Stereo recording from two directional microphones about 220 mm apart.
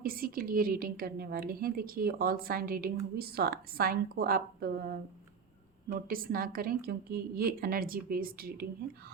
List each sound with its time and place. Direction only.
0.0 s a woman's voice: 40° right (ahead or behind)
5.9 s a woman's voice: 40° right (ahead or behind)